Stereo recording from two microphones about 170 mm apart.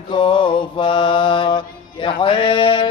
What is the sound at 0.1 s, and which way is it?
Mantra, 30° left (ahead or behind).